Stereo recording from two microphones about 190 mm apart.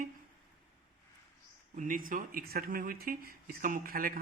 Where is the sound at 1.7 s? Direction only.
45° right (ahead or behind).